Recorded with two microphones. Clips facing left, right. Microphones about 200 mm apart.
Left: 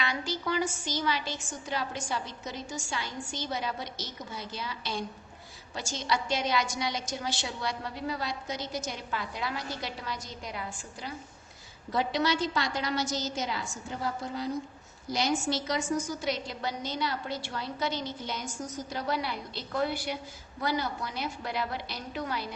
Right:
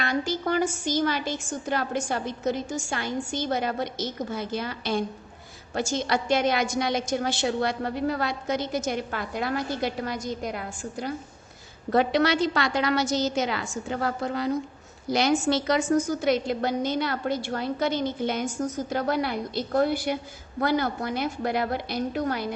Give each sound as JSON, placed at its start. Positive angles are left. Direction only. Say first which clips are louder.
{"t": 0.0, "sound": "a woman's voice", "louder": "right 6 dB", "side_deg": -50}